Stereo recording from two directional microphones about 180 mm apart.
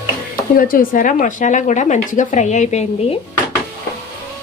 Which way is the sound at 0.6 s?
55° left (ahead or behind).